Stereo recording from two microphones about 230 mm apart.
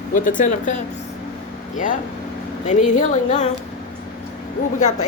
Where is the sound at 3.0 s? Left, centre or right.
Left.